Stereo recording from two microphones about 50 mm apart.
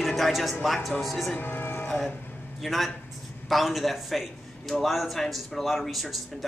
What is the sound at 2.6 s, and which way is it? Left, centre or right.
Speech, centre.